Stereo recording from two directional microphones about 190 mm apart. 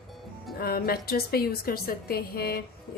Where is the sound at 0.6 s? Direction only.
55° left (ahead or behind).